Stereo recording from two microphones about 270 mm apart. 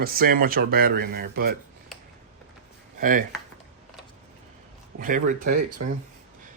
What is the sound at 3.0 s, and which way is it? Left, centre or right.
Speech, right.